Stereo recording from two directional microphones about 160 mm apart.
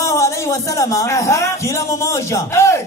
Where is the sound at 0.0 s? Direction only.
20° left (ahead or behind).